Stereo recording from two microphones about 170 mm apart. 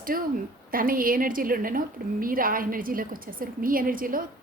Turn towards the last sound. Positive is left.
turn(degrees=-55)  # may be behind; listen again after turning